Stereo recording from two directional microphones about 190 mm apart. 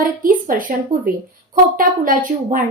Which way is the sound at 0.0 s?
45° right (ahead or behind).